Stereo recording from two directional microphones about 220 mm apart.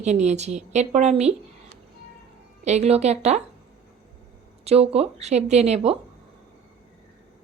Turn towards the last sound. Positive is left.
turn(degrees=-30)  # may be behind; listen again after turning